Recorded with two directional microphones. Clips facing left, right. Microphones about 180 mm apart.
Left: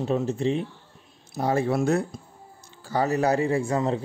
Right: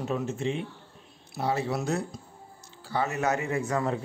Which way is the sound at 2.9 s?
35° left (ahead or behind).